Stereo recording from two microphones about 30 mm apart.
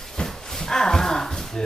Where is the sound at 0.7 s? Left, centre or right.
Centre.